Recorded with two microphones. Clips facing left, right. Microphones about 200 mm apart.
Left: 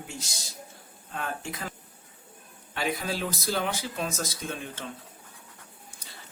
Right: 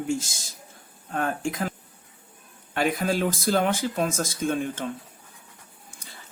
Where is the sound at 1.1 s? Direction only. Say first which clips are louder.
Right 8 dB; 50° right (ahead or behind).